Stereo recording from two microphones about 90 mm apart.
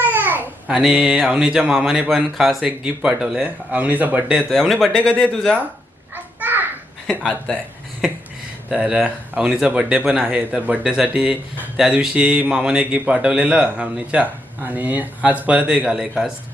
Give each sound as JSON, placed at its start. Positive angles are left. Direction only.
{"t": 0.0, "sound": "babbling", "side_deg": -20}
{"t": 0.7, "sound": "a man's voice", "side_deg": -5}
{"t": 4.7, "sound": "speech", "side_deg": 5}
{"t": 6.1, "sound": "a sound", "side_deg": -20}
{"t": 7.3, "sound": "speech", "side_deg": 10}
{"t": 8.7, "sound": "a man's voice", "side_deg": -10}